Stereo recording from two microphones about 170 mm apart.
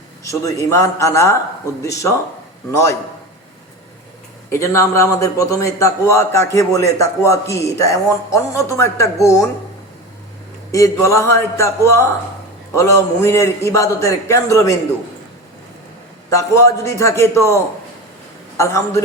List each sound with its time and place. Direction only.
0.3 s a man's voice: 20° left (ahead or behind)
4.4 s a man's voice: 15° left (ahead or behind)
10.7 s a man's voice: 20° left (ahead or behind)
16.3 s a man's voice: 20° left (ahead or behind)